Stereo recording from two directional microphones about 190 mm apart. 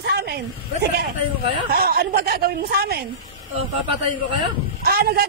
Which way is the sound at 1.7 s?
55° right (ahead or behind).